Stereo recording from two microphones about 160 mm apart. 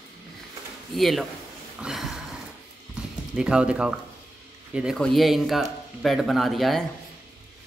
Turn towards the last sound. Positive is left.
turn(degrees=0)  # may be behind; listen again after turning